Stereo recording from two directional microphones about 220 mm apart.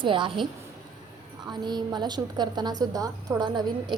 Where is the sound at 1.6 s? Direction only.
20° right (ahead or behind).